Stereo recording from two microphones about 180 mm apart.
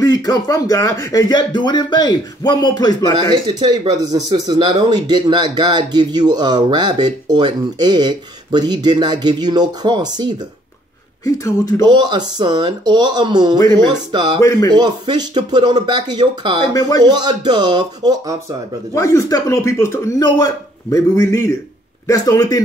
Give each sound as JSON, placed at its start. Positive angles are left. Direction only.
{"t": 0.0, "sound": "speech", "side_deg": 20}
{"t": 3.1, "sound": "speech", "side_deg": -25}
{"t": 11.2, "sound": "a man's voice", "side_deg": 20}
{"t": 11.8, "sound": "speech", "side_deg": -25}
{"t": 18.9, "sound": "a man's voice", "side_deg": 15}